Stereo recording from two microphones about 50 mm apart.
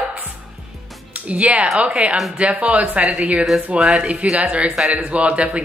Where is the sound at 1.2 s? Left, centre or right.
Right.